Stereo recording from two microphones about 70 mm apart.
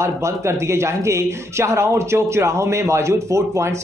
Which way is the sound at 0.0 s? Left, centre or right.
Right.